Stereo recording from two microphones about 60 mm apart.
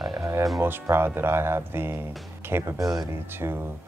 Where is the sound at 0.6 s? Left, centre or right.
Right.